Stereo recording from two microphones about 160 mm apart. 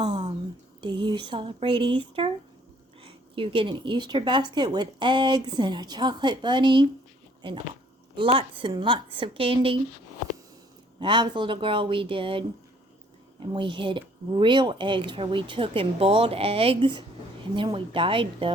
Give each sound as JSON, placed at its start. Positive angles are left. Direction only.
{"t": 0.0, "sound": "a sound", "side_deg": -25}
{"t": 0.8, "sound": "speech", "side_deg": -30}
{"t": 8.1, "sound": "speech", "side_deg": -35}
{"t": 11.0, "sound": "speech", "side_deg": -30}